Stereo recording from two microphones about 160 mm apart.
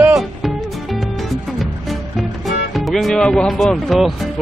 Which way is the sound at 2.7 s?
Centre (ahead or behind).